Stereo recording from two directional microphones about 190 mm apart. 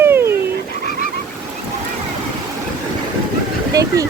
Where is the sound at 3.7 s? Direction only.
20° right (ahead or behind).